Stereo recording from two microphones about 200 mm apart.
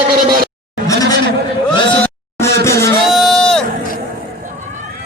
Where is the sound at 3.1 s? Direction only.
Centre (ahead or behind).